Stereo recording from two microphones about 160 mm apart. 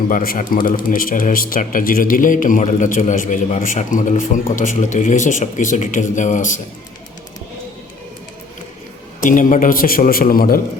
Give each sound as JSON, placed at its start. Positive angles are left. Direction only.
{"t": 0.1, "sound": "a man's voice", "side_deg": 60}
{"t": 9.2, "sound": "a man's voice", "side_deg": 55}